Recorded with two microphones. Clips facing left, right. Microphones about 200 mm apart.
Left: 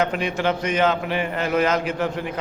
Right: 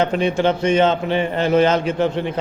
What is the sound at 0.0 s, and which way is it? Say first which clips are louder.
A man's voice: right 5 dB; 30° right (ahead or behind).